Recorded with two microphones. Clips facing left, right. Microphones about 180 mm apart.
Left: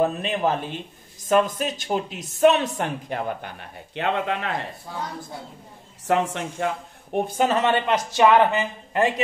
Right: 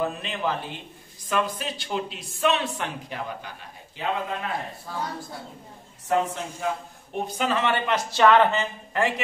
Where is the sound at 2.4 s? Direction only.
45° left (ahead or behind).